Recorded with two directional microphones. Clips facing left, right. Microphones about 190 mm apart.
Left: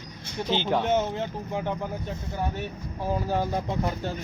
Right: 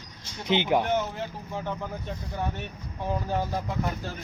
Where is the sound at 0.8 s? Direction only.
25° left (ahead or behind).